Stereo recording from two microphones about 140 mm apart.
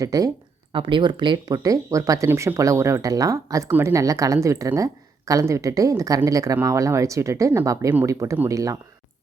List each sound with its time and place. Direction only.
0.0 s speech: 25° right (ahead or behind)
0.7 s speech: 35° right (ahead or behind)